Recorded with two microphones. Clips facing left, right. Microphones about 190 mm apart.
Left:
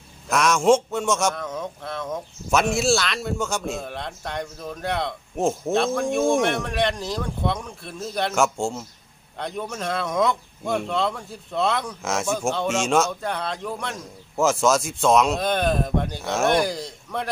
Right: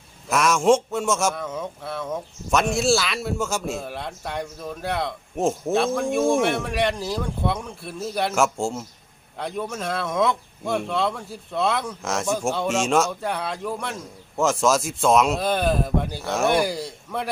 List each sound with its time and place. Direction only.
0.3 s a man's voice: centre (ahead or behind)